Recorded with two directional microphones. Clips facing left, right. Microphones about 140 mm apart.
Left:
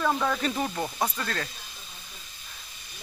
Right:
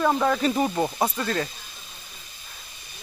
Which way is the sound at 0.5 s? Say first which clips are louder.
Right 6 dB; 20° right (ahead or behind).